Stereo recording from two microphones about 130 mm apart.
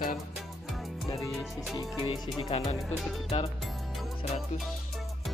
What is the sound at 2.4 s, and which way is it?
Speech, 50° left (ahead or behind).